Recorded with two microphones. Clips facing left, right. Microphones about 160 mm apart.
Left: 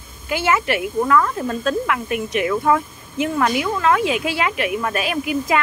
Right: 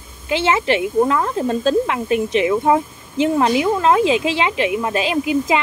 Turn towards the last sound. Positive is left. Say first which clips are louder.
# right 3 dB
turn(degrees=-25)  # may be behind; listen again after turning